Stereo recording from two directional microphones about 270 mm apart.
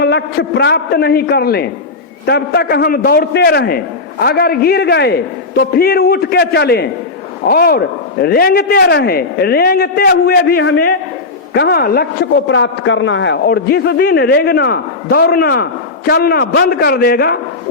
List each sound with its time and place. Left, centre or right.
0.0 s a man's voice: left